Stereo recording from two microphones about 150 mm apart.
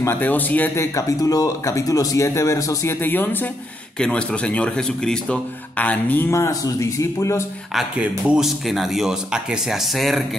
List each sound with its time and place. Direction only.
0.0 s speech: 15° left (ahead or behind)
7.7 s speech: 10° right (ahead or behind)